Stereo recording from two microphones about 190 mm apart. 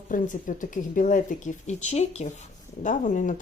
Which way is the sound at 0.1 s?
45° left (ahead or behind).